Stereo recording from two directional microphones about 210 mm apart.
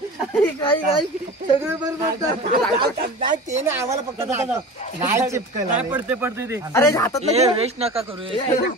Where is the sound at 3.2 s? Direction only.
35° right (ahead or behind).